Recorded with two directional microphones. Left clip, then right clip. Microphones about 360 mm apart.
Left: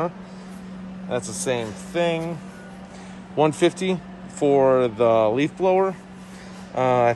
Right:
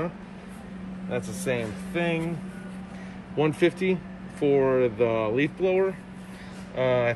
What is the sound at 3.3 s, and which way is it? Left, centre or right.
Speech, centre.